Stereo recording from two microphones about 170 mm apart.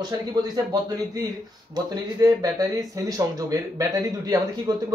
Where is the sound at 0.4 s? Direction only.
20° right (ahead or behind).